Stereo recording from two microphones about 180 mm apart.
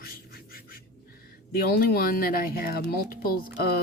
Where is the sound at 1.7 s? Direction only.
55° left (ahead or behind).